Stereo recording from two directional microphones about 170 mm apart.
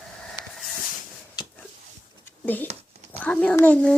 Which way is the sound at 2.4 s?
10° left (ahead or behind).